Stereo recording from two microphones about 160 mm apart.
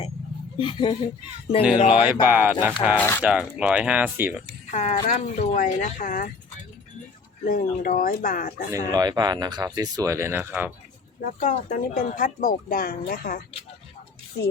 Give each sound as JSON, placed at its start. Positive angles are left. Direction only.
{"t": 0.6, "sound": "speech", "side_deg": 30}
{"t": 1.9, "sound": "speech", "side_deg": -10}
{"t": 3.0, "sound": "speech", "side_deg": 10}
{"t": 3.2, "sound": "speech", "side_deg": -5}
{"t": 4.7, "sound": "speech", "side_deg": 45}
{"t": 7.4, "sound": "speech", "side_deg": 65}
{"t": 8.9, "sound": "speech", "side_deg": -25}
{"t": 11.2, "sound": "speech", "side_deg": 55}